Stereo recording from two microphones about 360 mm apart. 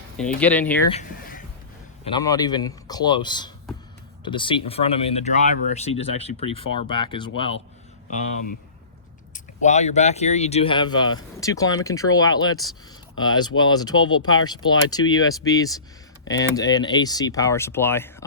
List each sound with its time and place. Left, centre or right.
0.2 s speech: centre
0.9 s a sound: centre
2.0 s speech: centre
9.3 s speech: centre
15.0 s speech: left
15.4 s speech: centre